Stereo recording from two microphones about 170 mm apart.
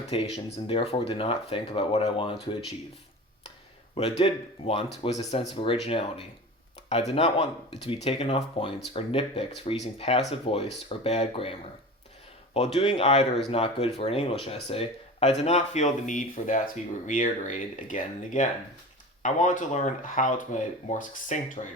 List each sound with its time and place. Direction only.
0.1 s speech: 35° left (ahead or behind)
3.9 s speech: 35° left (ahead or behind)
12.5 s speech: 40° left (ahead or behind)